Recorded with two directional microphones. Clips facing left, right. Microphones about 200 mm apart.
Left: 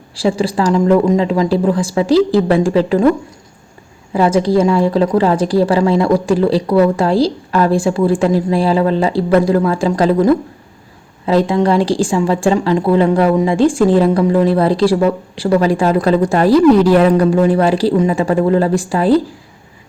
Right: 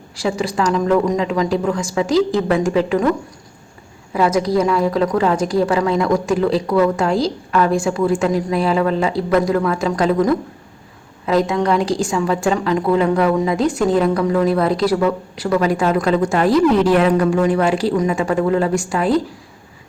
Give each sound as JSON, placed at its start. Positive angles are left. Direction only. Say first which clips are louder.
{"t": 0.2, "sound": "a woman's voice", "louder": "left 4 dB", "side_deg": 30}
{"t": 4.1, "sound": "a woman's voice", "louder": "left 4 dB", "side_deg": 30}